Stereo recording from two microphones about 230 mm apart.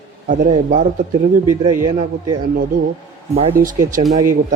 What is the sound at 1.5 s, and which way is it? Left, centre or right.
Speech, centre.